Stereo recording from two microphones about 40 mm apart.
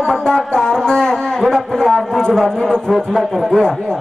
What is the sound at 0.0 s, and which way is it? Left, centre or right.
Music, centre.